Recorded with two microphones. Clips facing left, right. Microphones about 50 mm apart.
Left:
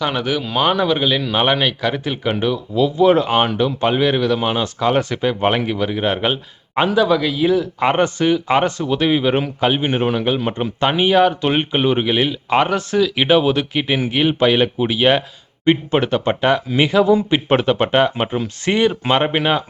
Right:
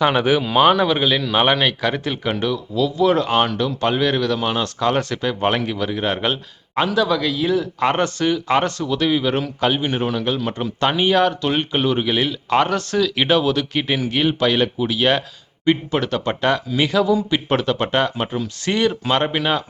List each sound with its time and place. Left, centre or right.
0.0 s speech: centre
0.4 s speech: centre
8.9 s speech: left
13.7 s speech: centre
16.6 s speech: left